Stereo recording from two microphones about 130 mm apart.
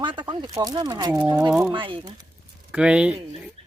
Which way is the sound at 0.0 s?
40° right (ahead or behind).